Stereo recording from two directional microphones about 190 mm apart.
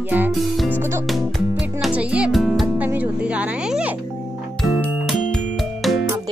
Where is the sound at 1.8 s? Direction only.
5° right (ahead or behind).